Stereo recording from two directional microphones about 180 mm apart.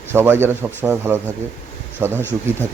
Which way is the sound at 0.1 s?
10° right (ahead or behind).